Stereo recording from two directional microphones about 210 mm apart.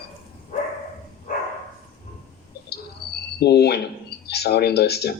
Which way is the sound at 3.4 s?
50° left (ahead or behind).